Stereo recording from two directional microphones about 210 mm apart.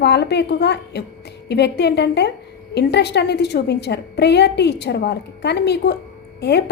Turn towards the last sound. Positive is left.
turn(degrees=50)  # may be behind; listen again after turning